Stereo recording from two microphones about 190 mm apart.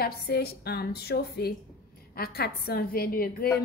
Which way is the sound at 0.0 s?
55° left (ahead or behind).